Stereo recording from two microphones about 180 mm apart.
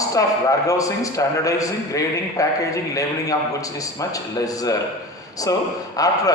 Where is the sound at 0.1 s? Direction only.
20° left (ahead or behind).